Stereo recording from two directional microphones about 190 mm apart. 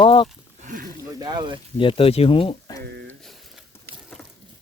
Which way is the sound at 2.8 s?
65° right (ahead or behind).